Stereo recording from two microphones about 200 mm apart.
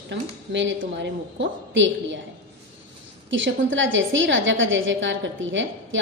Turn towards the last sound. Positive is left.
turn(degrees=-70)  # may be behind; listen again after turning